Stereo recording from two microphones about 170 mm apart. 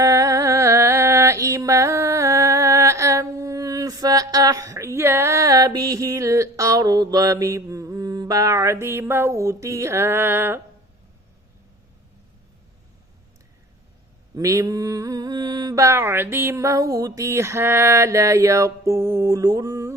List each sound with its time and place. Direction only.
0.0 s music: 20° right (ahead or behind)
14.3 s mantra: 20° right (ahead or behind)